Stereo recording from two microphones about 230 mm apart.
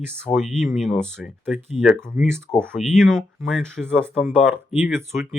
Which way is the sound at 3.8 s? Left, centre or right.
Centre.